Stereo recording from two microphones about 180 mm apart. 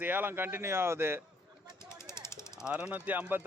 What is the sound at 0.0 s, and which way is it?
Speech, 10° right (ahead or behind).